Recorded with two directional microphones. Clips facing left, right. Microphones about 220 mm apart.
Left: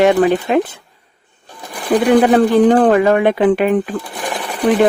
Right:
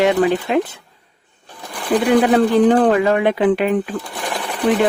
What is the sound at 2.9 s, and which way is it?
Speech, 50° left (ahead or behind).